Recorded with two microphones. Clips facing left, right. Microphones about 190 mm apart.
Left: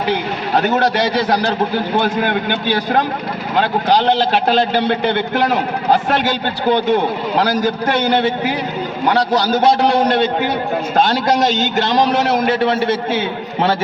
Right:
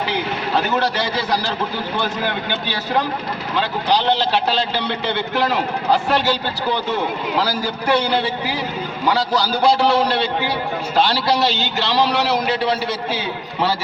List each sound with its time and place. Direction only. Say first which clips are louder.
2.0 s a man's voice: left 5 dB; 55° left (ahead or behind)
10.1 s a man's voice: left 5 dB; 50° left (ahead or behind)